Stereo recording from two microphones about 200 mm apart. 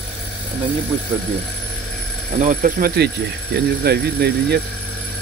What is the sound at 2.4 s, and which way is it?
Speech, 40° right (ahead or behind).